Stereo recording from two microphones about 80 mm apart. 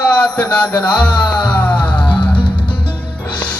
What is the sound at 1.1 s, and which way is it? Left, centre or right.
Music, left.